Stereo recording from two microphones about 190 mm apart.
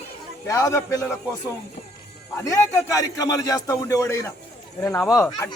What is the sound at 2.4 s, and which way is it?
A man's voice, 15° left (ahead or behind).